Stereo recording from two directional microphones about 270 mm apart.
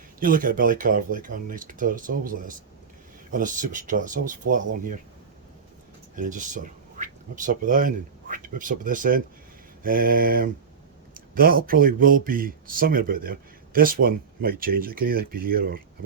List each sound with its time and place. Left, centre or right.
0.2 s speech: right
6.1 s speech: right